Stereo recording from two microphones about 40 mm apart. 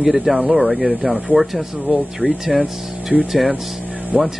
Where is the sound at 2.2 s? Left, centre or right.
Right.